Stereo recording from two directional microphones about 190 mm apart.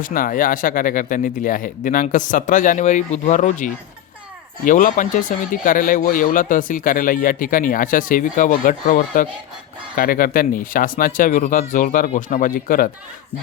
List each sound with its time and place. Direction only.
0.0 s speech: 45° left (ahead or behind)